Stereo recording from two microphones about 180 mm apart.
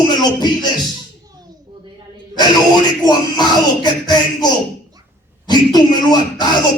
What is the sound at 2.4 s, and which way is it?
Speech, 25° left (ahead or behind).